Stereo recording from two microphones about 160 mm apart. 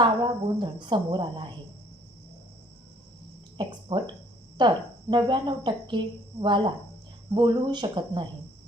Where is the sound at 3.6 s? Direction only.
30° right (ahead or behind).